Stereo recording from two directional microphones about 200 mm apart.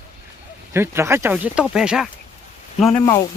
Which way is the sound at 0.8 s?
10° right (ahead or behind).